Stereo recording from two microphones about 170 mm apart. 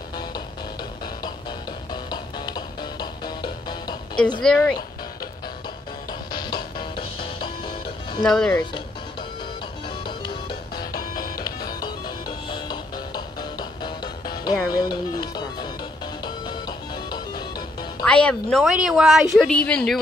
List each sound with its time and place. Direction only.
2.0 s music: 25° left (ahead or behind)
4.4 s speech: 5° left (ahead or behind)
6.3 s music: 25° left (ahead or behind)
8.2 s speech: 5° left (ahead or behind)
10.0 s music: 25° left (ahead or behind)
10.8 s music: 60° left (ahead or behind)
12.4 s music: 25° left (ahead or behind)
14.7 s speech: 25° left (ahead or behind)
16.3 s music: 25° left (ahead or behind)
18.0 s speech: 5° left (ahead or behind)